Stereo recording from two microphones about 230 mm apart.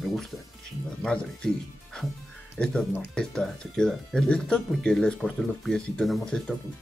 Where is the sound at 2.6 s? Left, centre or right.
Centre.